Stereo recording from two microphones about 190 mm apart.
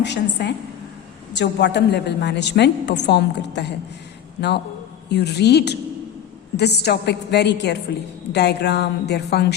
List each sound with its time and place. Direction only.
0.0 s a woman's voice: 65° left (ahead or behind)